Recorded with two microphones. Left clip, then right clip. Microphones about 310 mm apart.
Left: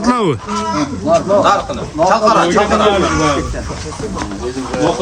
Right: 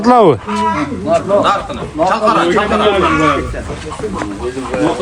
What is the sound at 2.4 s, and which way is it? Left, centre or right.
Speech, left.